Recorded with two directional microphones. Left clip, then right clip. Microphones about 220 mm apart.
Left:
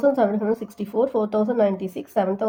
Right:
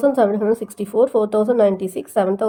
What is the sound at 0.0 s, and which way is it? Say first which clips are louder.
A woman's voice: right 4 dB; 30° right (ahead or behind).